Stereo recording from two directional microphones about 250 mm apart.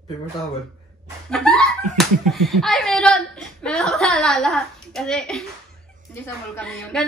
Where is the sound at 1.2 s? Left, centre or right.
Centre.